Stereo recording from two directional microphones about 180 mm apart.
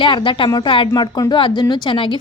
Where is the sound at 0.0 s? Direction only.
25° left (ahead or behind).